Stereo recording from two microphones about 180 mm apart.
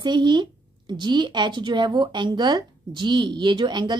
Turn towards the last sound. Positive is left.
turn(degrees=-25)  # may be behind; listen again after turning